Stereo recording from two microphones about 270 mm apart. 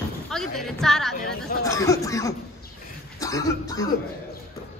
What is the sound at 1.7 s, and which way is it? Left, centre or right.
Speech, centre.